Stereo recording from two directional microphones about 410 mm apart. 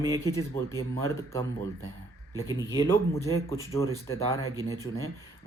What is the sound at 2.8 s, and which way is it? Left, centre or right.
Speech, centre.